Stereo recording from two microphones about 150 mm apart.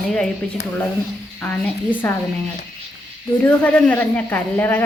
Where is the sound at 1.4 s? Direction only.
10° left (ahead or behind).